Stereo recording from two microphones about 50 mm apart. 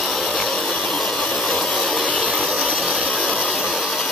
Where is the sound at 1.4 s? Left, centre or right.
Centre.